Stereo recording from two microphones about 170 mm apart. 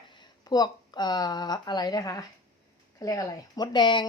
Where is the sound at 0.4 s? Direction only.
25° left (ahead or behind).